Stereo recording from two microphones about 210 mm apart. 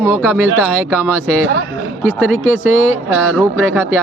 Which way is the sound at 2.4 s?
90° right.